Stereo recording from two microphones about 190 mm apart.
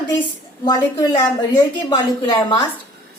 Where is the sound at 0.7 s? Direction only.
20° left (ahead or behind).